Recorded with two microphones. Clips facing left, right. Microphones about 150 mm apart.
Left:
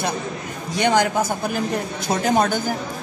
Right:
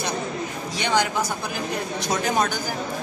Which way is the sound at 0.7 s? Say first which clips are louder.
Left 5 dB; 50° left (ahead or behind).